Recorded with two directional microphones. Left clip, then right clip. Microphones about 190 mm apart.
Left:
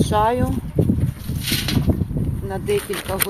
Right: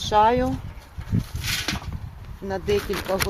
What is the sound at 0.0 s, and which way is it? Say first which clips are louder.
Speech: even; centre (ahead or behind).